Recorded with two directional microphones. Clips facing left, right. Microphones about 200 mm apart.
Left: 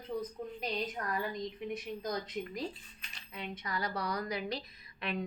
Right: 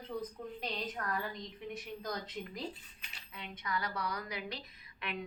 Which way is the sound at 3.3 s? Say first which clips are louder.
Left 1 dB; 35° left (ahead or behind).